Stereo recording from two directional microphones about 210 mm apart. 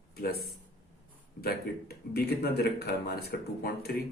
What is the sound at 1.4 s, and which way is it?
A man's voice, 45° left (ahead or behind).